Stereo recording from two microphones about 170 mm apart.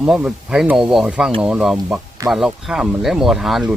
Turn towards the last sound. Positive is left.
turn(degrees=0)  # may be behind; listen again after turning